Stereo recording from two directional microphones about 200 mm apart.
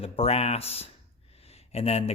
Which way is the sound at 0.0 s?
30° left (ahead or behind).